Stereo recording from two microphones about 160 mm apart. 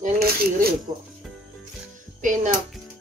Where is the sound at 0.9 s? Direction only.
30° right (ahead or behind).